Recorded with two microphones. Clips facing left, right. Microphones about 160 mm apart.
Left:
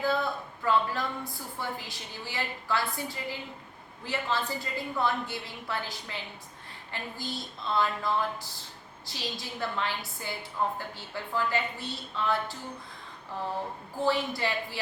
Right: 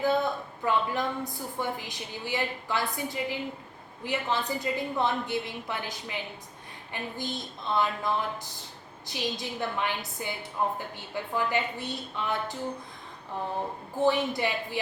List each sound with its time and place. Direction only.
0.0 s a woman's voice: 20° right (ahead or behind)
14.0 s a woman's voice: 20° right (ahead or behind)